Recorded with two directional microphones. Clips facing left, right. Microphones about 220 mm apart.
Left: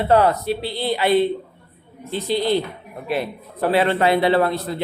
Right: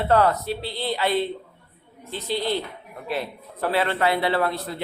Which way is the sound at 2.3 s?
15° left (ahead or behind).